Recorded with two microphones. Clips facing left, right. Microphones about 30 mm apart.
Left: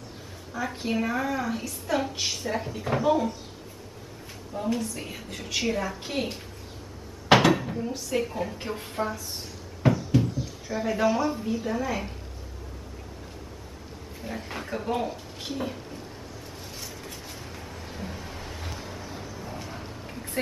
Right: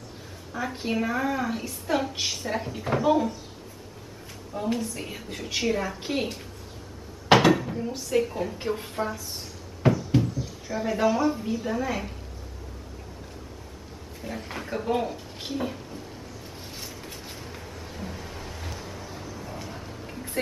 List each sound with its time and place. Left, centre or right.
0.7 s a woman's voice: centre
4.7 s a woman's voice: centre
7.2 s dishes: centre
8.1 s a woman's voice: centre
10.1 s drawer open or close: centre
10.7 s a woman's voice: centre
14.2 s a woman's voice: centre
16.5 s vehicle: centre
19.9 s a sound: centre